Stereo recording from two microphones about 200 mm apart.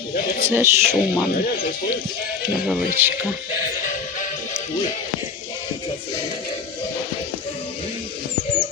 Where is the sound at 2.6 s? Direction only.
10° right (ahead or behind).